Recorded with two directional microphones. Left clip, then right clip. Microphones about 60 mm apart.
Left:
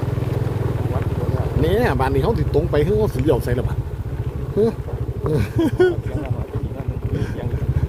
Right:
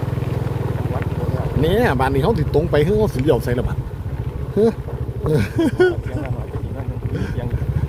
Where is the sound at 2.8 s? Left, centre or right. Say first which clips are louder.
Right 1 dB; right.